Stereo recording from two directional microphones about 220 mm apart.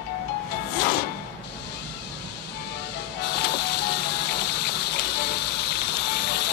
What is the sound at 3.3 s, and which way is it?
Music, 50° left (ahead or behind).